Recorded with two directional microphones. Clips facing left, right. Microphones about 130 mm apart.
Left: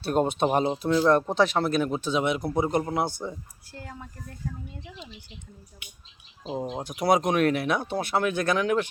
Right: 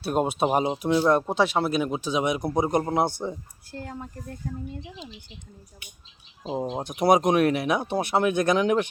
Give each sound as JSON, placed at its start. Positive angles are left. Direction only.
{"t": 0.0, "sound": "speech", "side_deg": -10}
{"t": 3.8, "sound": "speech", "side_deg": -40}
{"t": 6.6, "sound": "speech", "side_deg": -25}